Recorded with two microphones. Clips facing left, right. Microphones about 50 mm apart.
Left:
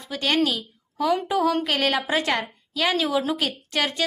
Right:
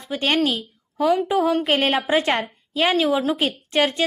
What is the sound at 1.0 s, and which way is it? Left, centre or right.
Speech, centre.